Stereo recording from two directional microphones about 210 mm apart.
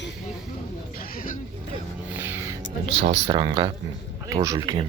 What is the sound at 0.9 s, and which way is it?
Speech, 45° left (ahead or behind).